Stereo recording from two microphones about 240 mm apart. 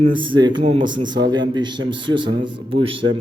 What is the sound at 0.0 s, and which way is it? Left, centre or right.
Speech, centre.